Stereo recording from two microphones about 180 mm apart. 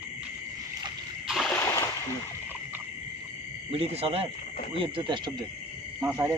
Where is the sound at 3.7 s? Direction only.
35° right (ahead or behind).